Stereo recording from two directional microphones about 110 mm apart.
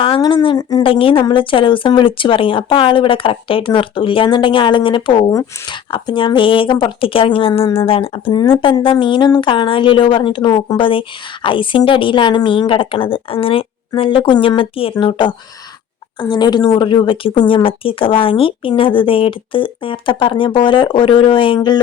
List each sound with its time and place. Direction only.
0.2 s a woman's voice: 40° left (ahead or behind)
0.8 s speech: 55° left (ahead or behind)
14.9 s speech: 45° left (ahead or behind)